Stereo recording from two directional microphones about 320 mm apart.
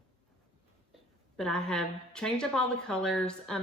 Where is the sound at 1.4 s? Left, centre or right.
Centre.